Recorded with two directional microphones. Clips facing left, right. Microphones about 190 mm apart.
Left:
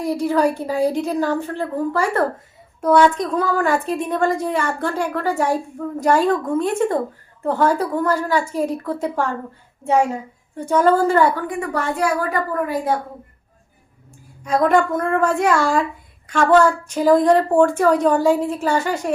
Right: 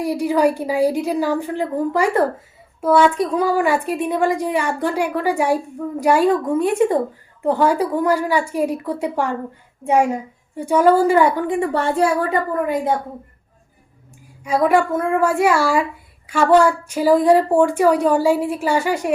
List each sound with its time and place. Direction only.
0.0 s speech: 10° right (ahead or behind)
11.4 s a woman's voice: 25° right (ahead or behind)
14.4 s speech: 10° right (ahead or behind)